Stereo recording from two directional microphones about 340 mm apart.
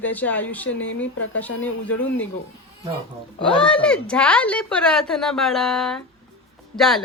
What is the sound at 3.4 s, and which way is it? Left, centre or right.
A woman's voice, centre.